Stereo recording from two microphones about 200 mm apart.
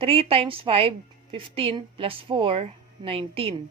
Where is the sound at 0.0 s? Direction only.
30° right (ahead or behind).